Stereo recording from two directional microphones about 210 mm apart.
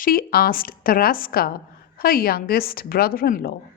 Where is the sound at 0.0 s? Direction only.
45° left (ahead or behind).